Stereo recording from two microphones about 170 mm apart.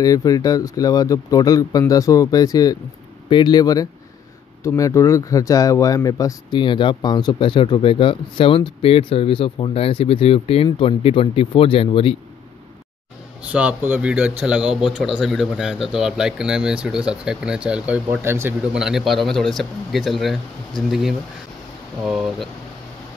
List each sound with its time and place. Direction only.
0.0 s speech: 20° left (ahead or behind)
13.4 s speech: 10° right (ahead or behind)
18.8 s speech: centre (ahead or behind)